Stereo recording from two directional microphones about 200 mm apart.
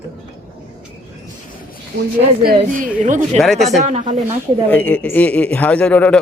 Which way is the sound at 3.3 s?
Centre (ahead or behind).